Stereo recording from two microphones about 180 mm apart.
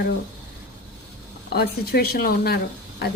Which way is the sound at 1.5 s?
60° left (ahead or behind).